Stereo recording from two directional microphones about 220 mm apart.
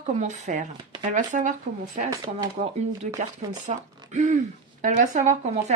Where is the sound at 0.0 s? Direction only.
35° right (ahead or behind).